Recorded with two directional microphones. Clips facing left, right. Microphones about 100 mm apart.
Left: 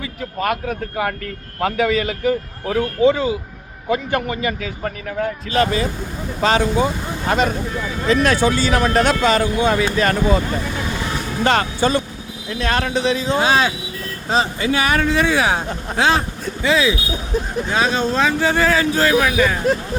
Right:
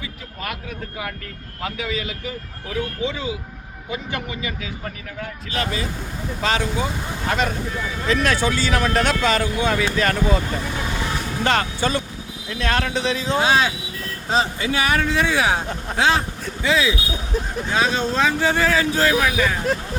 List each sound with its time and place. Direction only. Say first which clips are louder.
0.0 s a man's voice: left 9 dB; 50° left (ahead or behind); by 10.4 s 30° left (ahead or behind)
11.4 s speech: left 4 dB; 25° left (ahead or behind); by 13.3 s 10° left (ahead or behind)
13.4 s speech: even; 55° left (ahead or behind)
16.0 s a man's voice: left 2 dB; 45° left (ahead or behind)